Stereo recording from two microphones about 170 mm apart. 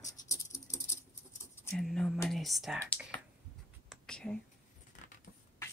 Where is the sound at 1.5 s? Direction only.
15° left (ahead or behind).